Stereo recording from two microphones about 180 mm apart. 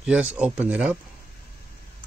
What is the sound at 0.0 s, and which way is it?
Speech, 5° right (ahead or behind).